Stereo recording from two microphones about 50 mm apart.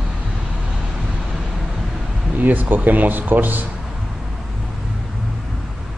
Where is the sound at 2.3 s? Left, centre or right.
Right.